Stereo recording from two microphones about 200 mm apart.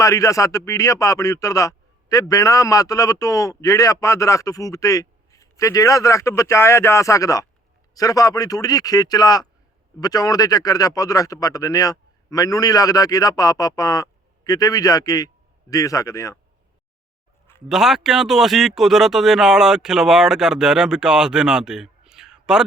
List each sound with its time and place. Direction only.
0.0 s speech: 15° left (ahead or behind)
17.7 s speech: centre (ahead or behind)